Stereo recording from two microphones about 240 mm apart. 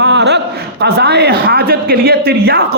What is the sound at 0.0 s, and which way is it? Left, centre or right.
A man's voice, right.